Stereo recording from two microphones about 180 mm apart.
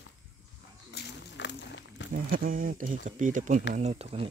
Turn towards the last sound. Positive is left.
turn(degrees=-35)  # may be behind; listen again after turning